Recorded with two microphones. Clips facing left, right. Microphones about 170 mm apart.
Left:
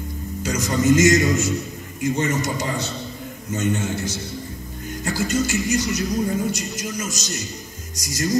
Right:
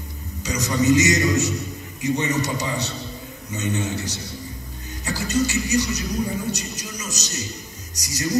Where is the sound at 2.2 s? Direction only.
55° left (ahead or behind).